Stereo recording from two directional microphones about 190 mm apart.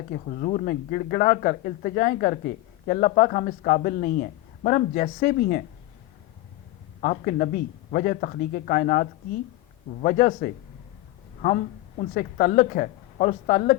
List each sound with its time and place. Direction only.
0.1 s a woman's voice: 40° left (ahead or behind)
7.0 s a woman's voice: 45° left (ahead or behind)